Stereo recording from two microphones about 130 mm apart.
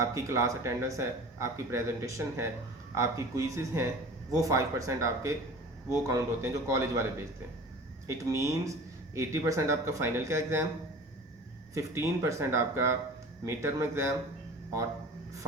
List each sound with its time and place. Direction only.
0.0 s speech: 25° right (ahead or behind)
8.0 s speech: 25° right (ahead or behind)
11.7 s speech: 25° right (ahead or behind)